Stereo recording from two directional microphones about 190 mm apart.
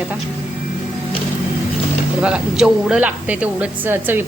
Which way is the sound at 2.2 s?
5° right (ahead or behind).